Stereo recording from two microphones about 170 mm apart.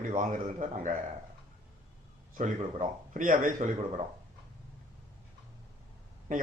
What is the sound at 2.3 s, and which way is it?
Speech, 45° right (ahead or behind).